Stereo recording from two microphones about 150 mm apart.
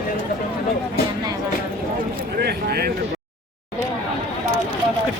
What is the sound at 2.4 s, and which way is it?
Speech, 90° right.